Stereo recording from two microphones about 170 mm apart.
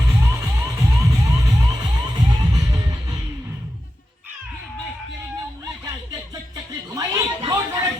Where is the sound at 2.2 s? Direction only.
20° right (ahead or behind).